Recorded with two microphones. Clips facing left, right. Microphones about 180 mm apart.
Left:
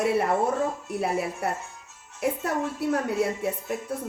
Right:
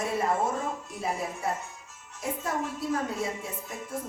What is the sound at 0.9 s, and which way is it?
A woman's voice, 65° left (ahead or behind).